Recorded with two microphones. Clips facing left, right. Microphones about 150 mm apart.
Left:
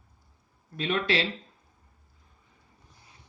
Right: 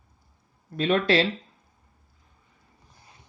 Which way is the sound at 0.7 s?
40° right (ahead or behind).